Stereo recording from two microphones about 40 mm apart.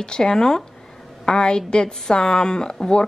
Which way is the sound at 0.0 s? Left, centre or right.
Centre.